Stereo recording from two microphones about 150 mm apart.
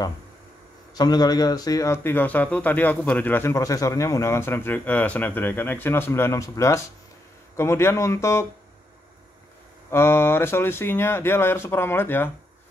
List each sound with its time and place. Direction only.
0.9 s speech: 25° left (ahead or behind)
9.8 s speech: 15° left (ahead or behind)